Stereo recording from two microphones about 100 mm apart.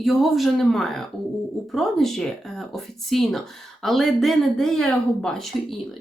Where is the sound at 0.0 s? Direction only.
Centre (ahead or behind).